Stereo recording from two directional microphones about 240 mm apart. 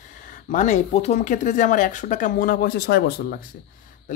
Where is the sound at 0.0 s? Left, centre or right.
Left.